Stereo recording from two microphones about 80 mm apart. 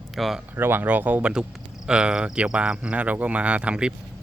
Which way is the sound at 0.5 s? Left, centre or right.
Right.